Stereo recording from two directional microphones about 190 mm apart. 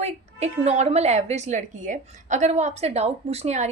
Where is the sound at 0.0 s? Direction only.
35° right (ahead or behind).